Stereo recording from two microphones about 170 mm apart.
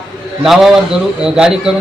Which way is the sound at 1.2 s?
5° right (ahead or behind).